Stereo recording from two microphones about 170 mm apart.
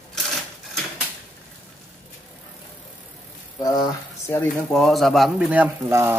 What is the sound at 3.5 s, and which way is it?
Speech, 25° left (ahead or behind).